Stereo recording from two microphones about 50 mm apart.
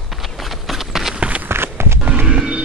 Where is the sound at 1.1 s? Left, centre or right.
Right.